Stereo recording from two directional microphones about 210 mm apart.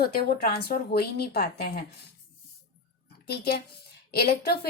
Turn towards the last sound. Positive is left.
turn(degrees=50)  # may be behind; listen again after turning